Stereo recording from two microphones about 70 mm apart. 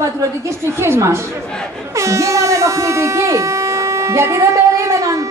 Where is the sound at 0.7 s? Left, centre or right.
Right.